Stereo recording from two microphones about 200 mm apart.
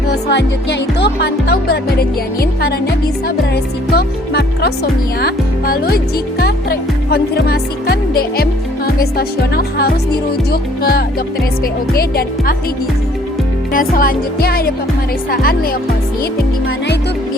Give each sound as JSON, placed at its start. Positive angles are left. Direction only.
{"t": 0.1, "sound": "music", "side_deg": 60}
{"t": 13.7, "sound": "music", "side_deg": 45}